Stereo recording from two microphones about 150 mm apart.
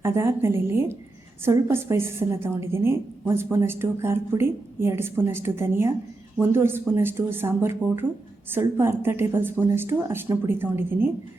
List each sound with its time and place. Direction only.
0.0 s speech: 15° right (ahead or behind)